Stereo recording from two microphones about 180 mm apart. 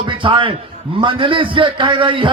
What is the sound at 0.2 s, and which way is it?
A man's voice, 30° right (ahead or behind).